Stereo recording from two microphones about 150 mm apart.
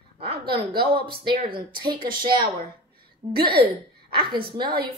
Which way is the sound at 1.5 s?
35° right (ahead or behind).